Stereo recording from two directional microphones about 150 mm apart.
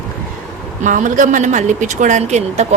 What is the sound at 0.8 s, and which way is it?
Speech, 55° right (ahead or behind).